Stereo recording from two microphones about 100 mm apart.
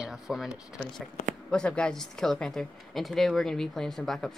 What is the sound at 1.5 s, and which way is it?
Speech, 10° left (ahead or behind).